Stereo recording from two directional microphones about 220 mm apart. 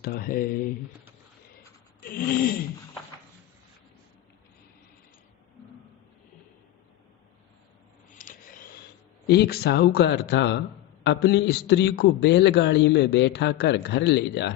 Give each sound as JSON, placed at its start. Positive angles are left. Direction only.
{"t": 0.0, "sound": "speech", "side_deg": 40}
{"t": 2.0, "sound": "speech", "side_deg": 40}
{"t": 8.1, "sound": "a sound", "side_deg": 40}
{"t": 9.2, "sound": "a man's voice", "side_deg": 45}